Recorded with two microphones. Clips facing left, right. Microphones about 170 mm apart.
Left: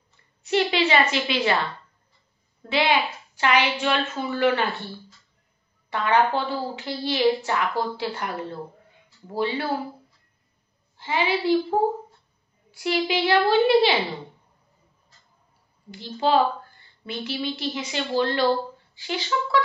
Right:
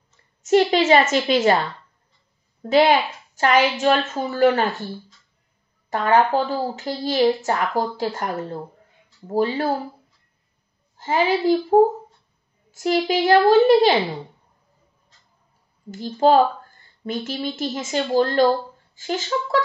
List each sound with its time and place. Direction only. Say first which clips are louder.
0.4 s speech: right 6 dB; 40° right (ahead or behind)
2.7 s speech: right 6 dB; 45° right (ahead or behind)
5.9 s speech: right 3 dB; 45° right (ahead or behind)
11.0 s speech: right 5 dB; 45° right (ahead or behind)
15.9 s speech: right 5 dB; 45° right (ahead or behind)